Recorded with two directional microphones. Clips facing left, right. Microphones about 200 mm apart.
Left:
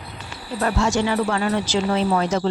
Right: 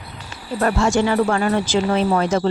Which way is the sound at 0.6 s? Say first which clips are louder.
Right 3 dB; 50° right (ahead or behind).